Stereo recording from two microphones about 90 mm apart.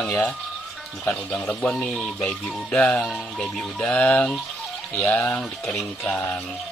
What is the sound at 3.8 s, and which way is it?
Speech, 15° left (ahead or behind).